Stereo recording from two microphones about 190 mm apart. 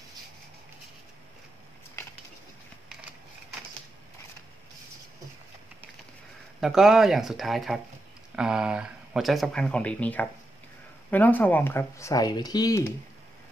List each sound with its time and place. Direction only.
6.6 s speech: centre (ahead or behind); by 12.8 s 20° left (ahead or behind)